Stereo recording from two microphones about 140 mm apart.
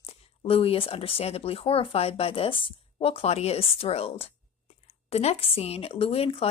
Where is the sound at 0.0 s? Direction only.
40° left (ahead or behind).